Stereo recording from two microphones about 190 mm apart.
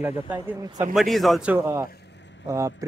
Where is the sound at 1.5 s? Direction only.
15° right (ahead or behind).